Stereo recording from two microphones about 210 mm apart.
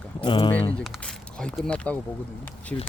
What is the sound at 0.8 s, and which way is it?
Speech, centre (ahead or behind).